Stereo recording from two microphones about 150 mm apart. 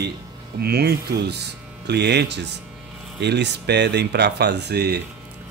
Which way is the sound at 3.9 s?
90° right.